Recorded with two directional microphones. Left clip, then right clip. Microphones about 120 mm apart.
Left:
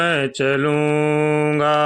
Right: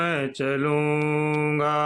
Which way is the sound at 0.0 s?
40° left (ahead or behind).